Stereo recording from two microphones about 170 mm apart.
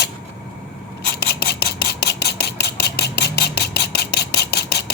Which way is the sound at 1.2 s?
75° left (ahead or behind).